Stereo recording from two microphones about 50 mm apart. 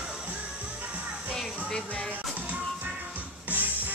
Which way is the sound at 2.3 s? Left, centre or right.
Right.